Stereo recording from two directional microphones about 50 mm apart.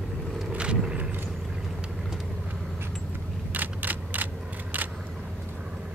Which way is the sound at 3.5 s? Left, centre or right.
Right.